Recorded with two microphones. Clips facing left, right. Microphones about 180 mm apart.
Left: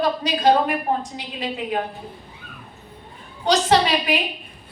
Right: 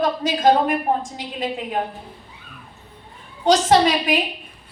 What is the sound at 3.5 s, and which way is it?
Speech, 45° right (ahead or behind).